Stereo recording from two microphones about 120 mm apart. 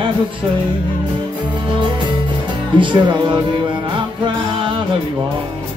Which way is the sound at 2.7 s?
40° right (ahead or behind).